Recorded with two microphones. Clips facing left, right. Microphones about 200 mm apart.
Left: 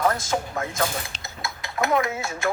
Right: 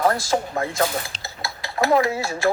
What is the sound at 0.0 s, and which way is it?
Dishes, 30° right (ahead or behind).